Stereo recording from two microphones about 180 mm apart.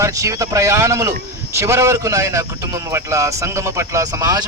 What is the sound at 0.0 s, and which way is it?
Speech, 20° right (ahead or behind).